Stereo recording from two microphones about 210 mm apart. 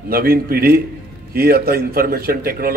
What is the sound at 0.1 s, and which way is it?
A man's voice, 45° right (ahead or behind).